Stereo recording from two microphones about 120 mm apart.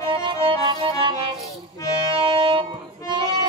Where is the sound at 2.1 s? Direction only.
50° right (ahead or behind).